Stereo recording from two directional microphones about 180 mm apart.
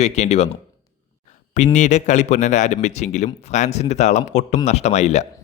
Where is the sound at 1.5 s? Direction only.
40° left (ahead or behind).